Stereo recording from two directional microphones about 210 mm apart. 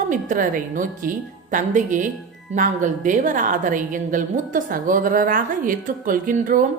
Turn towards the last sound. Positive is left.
turn(degrees=-40)  # may be behind; listen again after turning